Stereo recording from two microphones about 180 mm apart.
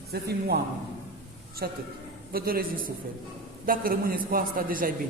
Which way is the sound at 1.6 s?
60° right (ahead or behind).